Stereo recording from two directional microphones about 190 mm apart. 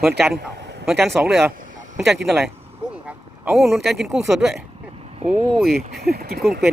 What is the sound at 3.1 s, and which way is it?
Vehicle, 5° right (ahead or behind).